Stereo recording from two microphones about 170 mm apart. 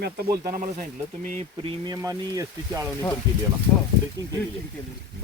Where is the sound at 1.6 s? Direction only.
25° right (ahead or behind).